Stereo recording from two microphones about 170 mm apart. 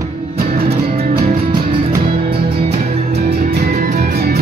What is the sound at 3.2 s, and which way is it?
Music, 65° right (ahead or behind).